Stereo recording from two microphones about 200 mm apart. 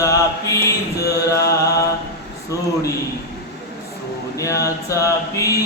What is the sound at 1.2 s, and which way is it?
Music, 15° left (ahead or behind).